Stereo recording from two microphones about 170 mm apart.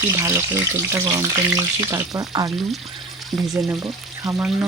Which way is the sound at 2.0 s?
Centre (ahead or behind).